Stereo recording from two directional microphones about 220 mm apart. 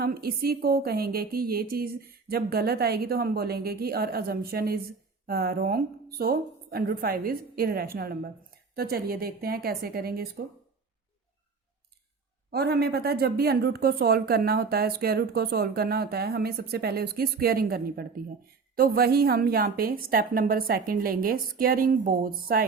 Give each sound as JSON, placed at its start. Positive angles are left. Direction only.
{"t": 0.0, "sound": "a woman's voice", "side_deg": -45}
{"t": 12.5, "sound": "a woman's voice", "side_deg": -45}